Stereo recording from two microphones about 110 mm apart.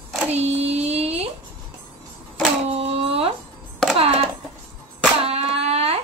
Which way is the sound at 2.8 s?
65° right (ahead or behind).